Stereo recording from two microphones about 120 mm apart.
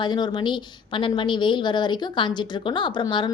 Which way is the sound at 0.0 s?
40° left (ahead or behind).